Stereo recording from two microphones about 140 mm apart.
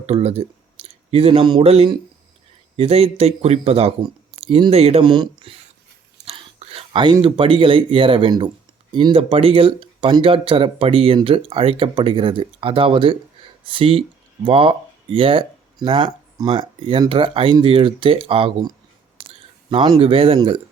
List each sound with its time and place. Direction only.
0.0 s speech: 45° right (ahead or behind)
5.0 s speech: 35° right (ahead or behind)
19.1 s a sound: 40° right (ahead or behind)